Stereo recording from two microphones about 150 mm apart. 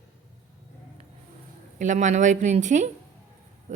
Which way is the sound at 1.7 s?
55° right (ahead or behind).